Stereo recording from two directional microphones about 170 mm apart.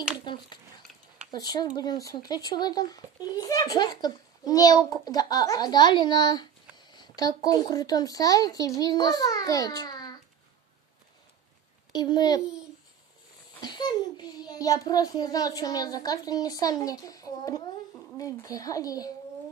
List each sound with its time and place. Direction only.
0.2 s a child's voice: 25° left (ahead or behind)
11.9 s a child's voice: 25° left (ahead or behind)
13.6 s a child's voice: 25° left (ahead or behind)